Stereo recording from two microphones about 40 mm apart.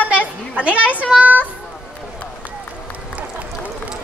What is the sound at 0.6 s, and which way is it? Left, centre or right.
Speech, right.